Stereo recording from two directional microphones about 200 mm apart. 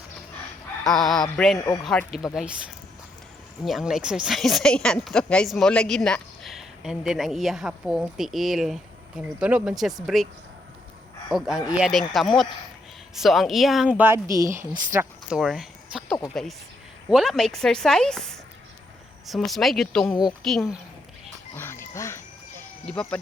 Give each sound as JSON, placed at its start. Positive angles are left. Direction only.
{"t": 0.9, "sound": "speech", "side_deg": 0}
{"t": 1.5, "sound": "speech", "side_deg": 15}
{"t": 1.8, "sound": "speech", "side_deg": 0}
{"t": 3.7, "sound": "speech", "side_deg": 0}
{"t": 11.3, "sound": "speech", "side_deg": 0}
{"t": 15.3, "sound": "speech", "side_deg": 0}
{"t": 21.5, "sound": "music", "side_deg": 10}
{"t": 22.9, "sound": "speech", "side_deg": 5}